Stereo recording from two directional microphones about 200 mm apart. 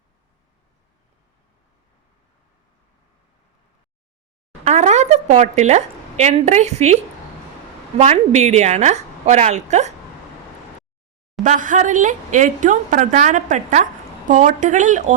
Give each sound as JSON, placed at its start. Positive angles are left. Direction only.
{"t": 4.6, "sound": "a woman's voice", "side_deg": -35}
{"t": 11.4, "sound": "a woman's voice", "side_deg": -40}